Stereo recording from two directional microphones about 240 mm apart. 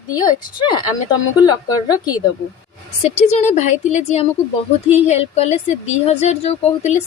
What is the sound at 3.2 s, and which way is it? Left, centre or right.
A woman's voice, left.